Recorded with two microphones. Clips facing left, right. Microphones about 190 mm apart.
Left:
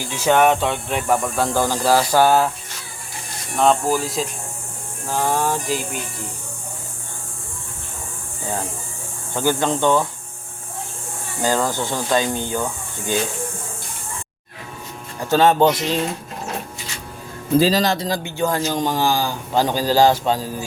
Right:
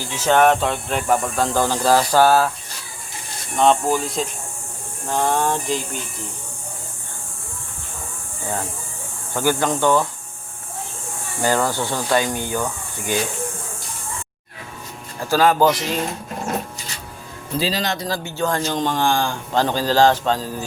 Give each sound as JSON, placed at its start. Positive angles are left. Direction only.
{"t": 0.0, "sound": "a man's voice", "side_deg": 10}
{"t": 3.6, "sound": "music", "side_deg": 5}
{"t": 9.3, "sound": "speech", "side_deg": 20}
{"t": 11.4, "sound": "a man's voice", "side_deg": 15}
{"t": 12.2, "sound": "speech", "side_deg": -15}
{"t": 15.2, "sound": "speech", "side_deg": 25}
{"t": 17.6, "sound": "speech", "side_deg": 40}
{"t": 17.9, "sound": "a man's voice", "side_deg": 20}